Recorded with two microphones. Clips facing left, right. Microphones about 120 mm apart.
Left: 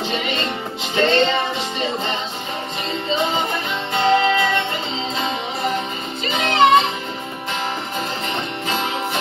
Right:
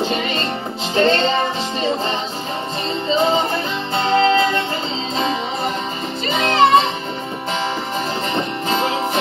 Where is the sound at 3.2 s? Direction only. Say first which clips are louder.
Right 4 dB; 30° right (ahead or behind).